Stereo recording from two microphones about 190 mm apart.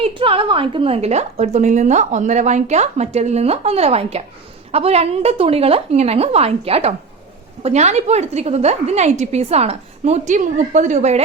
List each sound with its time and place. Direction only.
0.0 s a woman's voice: 25° right (ahead or behind)